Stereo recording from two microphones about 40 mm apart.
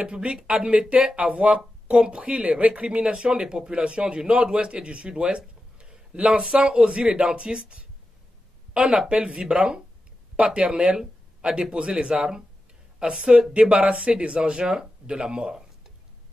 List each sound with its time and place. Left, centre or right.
0.0 s speech: right